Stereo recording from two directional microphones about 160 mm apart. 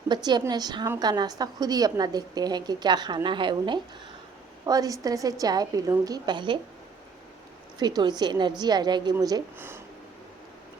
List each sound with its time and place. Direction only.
0.1 s a woman's voice: 25° right (ahead or behind)
7.8 s a woman's voice: 25° right (ahead or behind)